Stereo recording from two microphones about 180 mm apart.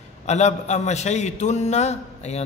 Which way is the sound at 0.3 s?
40° left (ahead or behind).